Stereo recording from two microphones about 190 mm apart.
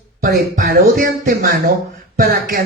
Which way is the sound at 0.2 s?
50° right (ahead or behind).